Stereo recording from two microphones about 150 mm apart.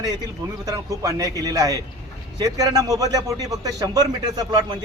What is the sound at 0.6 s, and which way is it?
A man's voice, 20° right (ahead or behind).